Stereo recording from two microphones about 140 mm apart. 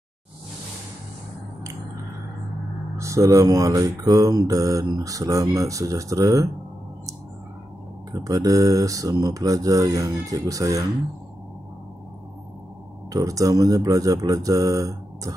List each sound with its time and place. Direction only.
3.0 s speech: 20° right (ahead or behind)
8.1 s speech: 25° right (ahead or behind)
13.1 s speech: 25° right (ahead or behind)